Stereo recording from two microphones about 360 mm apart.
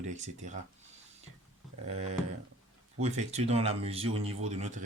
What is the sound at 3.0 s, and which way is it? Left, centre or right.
Speech, centre.